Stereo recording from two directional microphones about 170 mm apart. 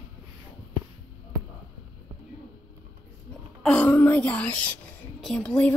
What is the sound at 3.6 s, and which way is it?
Wail, 5° left (ahead or behind).